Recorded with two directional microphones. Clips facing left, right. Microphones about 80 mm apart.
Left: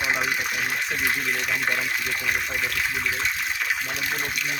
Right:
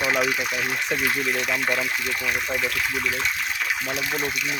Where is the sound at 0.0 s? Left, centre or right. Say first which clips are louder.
Right 3 dB; left.